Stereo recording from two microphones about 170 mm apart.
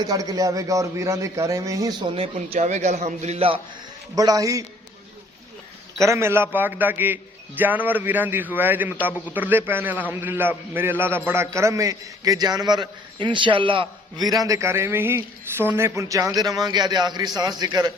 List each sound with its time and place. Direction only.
0.0 s a man's voice: 20° right (ahead or behind)
2.1 s a man's voice: 35° right (ahead or behind)
4.1 s a man's voice: 20° right (ahead or behind)
6.0 s a man's voice: 15° right (ahead or behind)